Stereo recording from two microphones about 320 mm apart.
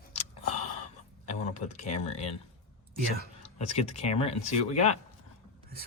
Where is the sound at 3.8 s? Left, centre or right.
Centre.